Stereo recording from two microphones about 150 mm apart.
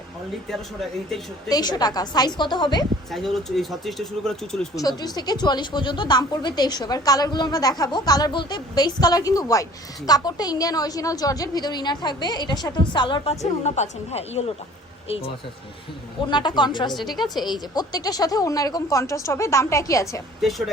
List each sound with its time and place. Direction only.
0.4 s speech: centre (ahead or behind)
1.5 s speech: 25° left (ahead or behind)
3.1 s speech: centre (ahead or behind)
4.7 s a woman's voice: 25° left (ahead or behind)
13.4 s a woman's voice: 50° left (ahead or behind)
16.2 s speech: 30° left (ahead or behind)
17.0 s speech: centre (ahead or behind)
17.4 s speech: 30° left (ahead or behind)
20.4 s speech: centre (ahead or behind)